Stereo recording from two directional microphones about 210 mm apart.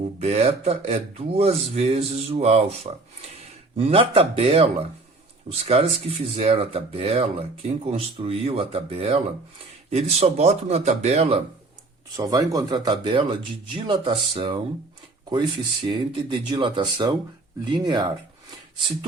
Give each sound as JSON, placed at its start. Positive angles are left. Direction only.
{"t": 0.2, "sound": "speech", "side_deg": -30}
{"t": 12.1, "sound": "speech", "side_deg": -15}
{"t": 15.9, "sound": "speech", "side_deg": -20}